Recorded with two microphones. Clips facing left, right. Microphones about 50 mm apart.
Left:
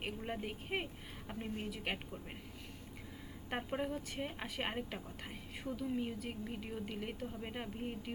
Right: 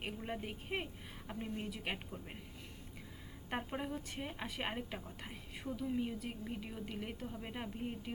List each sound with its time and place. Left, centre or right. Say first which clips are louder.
0.0 s a woman's voice: left 1 dB; centre
3.5 s a woman's voice: left 2 dB; centre